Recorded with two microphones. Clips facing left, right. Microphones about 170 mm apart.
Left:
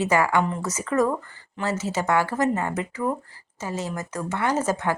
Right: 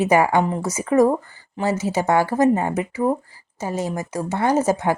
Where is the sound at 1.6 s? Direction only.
10° right (ahead or behind).